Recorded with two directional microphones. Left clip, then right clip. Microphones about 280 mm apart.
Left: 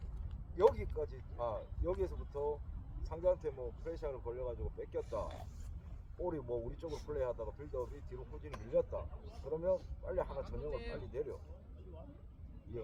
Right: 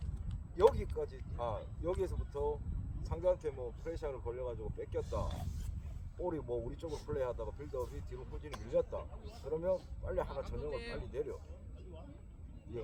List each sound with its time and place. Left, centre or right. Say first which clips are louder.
0.5 s speech: right 2 dB; centre
6.2 s speech: right 1 dB; right
10.7 s speech: right 1 dB; right
11.1 s speech: right 1 dB; centre
12.7 s speech: right 1 dB; centre